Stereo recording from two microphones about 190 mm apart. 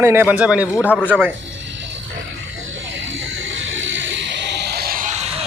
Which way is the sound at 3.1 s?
85° right.